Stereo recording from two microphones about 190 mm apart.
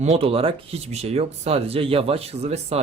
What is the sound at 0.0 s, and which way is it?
Speech, 30° right (ahead or behind).